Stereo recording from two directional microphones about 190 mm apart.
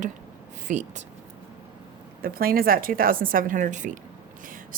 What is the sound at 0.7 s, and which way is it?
Speech, 40° right (ahead or behind).